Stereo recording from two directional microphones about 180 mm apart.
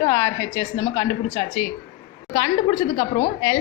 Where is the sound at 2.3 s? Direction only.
25° left (ahead or behind).